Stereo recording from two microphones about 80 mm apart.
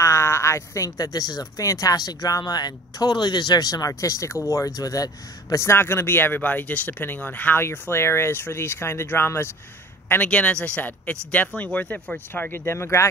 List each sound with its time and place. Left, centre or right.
0.0 s a man's voice: left
10.2 s a man's voice: centre; by 13.1 s left